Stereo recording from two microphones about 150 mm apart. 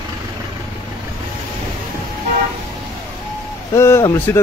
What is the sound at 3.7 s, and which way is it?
Speech, 20° left (ahead or behind).